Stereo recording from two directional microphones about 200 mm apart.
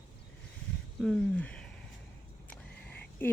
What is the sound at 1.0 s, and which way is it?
Speech, 5° left (ahead or behind).